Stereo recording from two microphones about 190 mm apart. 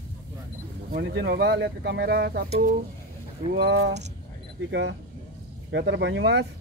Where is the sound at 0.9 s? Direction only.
65° right (ahead or behind).